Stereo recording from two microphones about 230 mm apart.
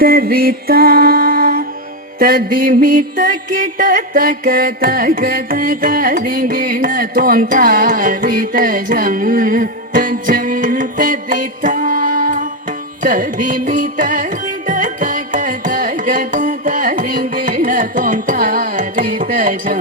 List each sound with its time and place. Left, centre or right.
0.0 s music: right
2.1 s mantra: right
14.7 s carnatic music: right